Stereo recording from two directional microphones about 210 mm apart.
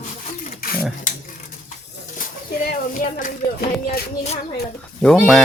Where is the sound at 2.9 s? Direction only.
40° left (ahead or behind).